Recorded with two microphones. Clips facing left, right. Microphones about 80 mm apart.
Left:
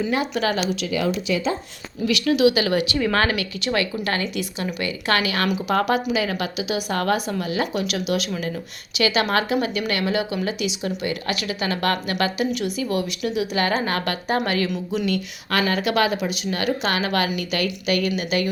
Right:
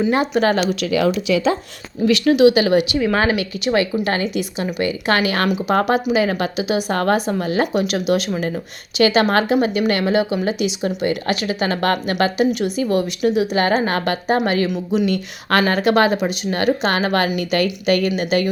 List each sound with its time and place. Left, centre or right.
0.1 s a woman's voice: right
0.5 s speech: right
0.9 s speech: right
2.0 s a woman's voice: right
2.3 s a woman's voice: right
3.0 s a woman's voice: centre; by 14.7 s right
15.4 s a woman's voice: right